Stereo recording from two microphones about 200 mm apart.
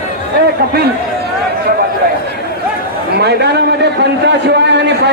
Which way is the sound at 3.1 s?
55° right (ahead or behind).